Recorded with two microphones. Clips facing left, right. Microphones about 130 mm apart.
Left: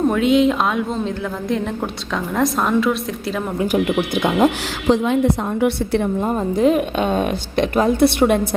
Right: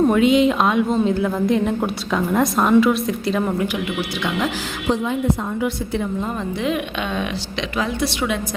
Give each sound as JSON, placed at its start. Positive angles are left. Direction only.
{"t": 0.1, "sound": "a woman's voice", "side_deg": 0}
{"t": 3.7, "sound": "a woman's voice", "side_deg": 45}
{"t": 4.9, "sound": "a woman's voice", "side_deg": 75}
{"t": 6.2, "sound": "a woman's voice", "side_deg": 40}